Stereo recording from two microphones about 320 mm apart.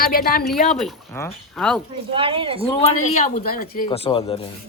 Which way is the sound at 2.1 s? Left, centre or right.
Centre.